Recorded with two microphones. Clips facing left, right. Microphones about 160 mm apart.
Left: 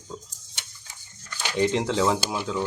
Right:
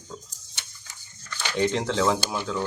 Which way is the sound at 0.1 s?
25° left (ahead or behind).